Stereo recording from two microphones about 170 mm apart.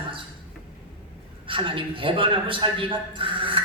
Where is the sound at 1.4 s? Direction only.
30° right (ahead or behind).